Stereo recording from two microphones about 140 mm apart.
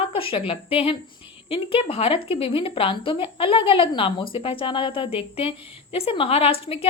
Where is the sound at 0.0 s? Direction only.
40° left (ahead or behind).